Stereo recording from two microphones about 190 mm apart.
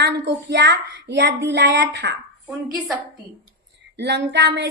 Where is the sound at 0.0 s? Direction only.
65° right (ahead or behind).